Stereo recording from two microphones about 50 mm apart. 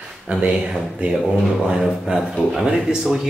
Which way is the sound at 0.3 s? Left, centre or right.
Centre.